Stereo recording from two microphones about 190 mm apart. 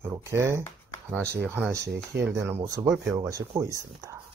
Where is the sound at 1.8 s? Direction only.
60° right (ahead or behind).